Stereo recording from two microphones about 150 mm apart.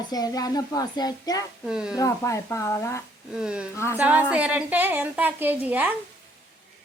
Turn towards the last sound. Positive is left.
turn(degrees=-10)  # may be behind; listen again after turning